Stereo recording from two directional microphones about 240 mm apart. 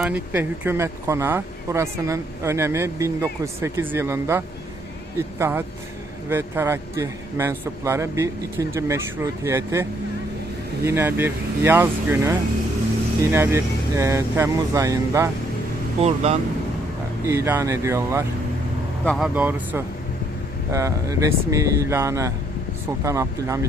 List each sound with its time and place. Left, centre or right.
0.0 s speech: centre
10.8 s speech: centre
16.0 s speech: right
17.2 s speech: centre
19.0 s speech: centre